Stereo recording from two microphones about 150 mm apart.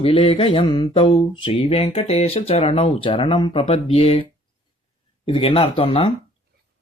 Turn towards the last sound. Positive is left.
turn(degrees=40)  # may be behind; listen again after turning